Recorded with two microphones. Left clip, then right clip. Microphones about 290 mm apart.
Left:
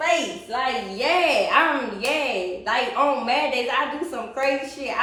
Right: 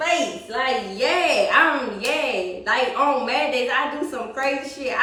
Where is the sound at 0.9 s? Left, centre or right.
Centre.